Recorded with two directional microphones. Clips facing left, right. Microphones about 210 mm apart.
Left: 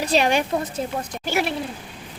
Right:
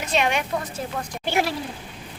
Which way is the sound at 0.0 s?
35° left (ahead or behind).